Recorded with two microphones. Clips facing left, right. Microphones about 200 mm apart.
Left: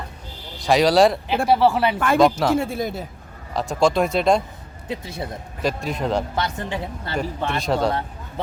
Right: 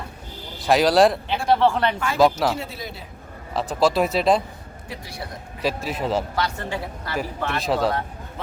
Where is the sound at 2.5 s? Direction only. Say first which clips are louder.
Left 9 dB; 50° left (ahead or behind).